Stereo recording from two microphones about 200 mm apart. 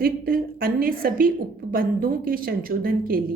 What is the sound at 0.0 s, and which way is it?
A woman's voice, 45° right (ahead or behind).